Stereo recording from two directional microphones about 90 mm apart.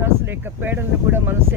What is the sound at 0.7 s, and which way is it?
Speech, 25° right (ahead or behind).